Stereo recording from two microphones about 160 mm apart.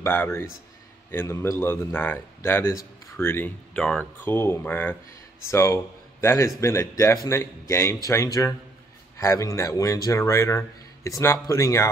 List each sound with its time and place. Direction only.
0.0 s a man's voice: 15° left (ahead or behind)